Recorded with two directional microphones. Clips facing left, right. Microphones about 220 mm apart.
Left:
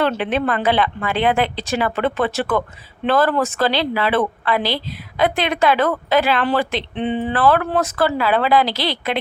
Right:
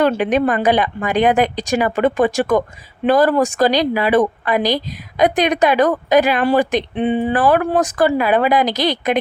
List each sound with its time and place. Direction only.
0.0 s a woman's voice: 15° right (ahead or behind)